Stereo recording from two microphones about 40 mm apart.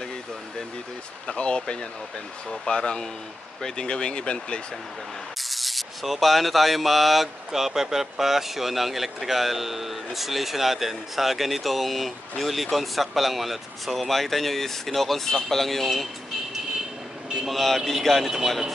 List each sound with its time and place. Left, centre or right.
1.2 s speech: left
5.5 s rub: centre
17.5 s rub: centre